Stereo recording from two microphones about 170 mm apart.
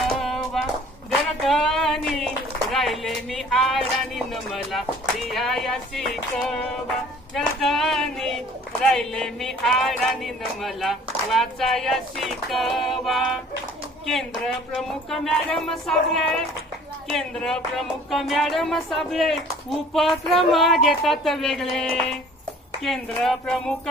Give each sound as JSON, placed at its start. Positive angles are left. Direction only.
{"t": 0.0, "sound": "music", "side_deg": 0}
{"t": 1.3, "sound": "a woman's voice", "side_deg": 0}
{"t": 7.3, "sound": "music", "side_deg": 0}